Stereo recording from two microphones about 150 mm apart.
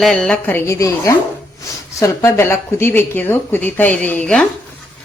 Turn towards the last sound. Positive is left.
turn(degrees=5)  # may be behind; listen again after turning